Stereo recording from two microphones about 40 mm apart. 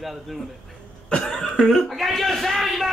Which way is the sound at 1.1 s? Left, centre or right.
Centre.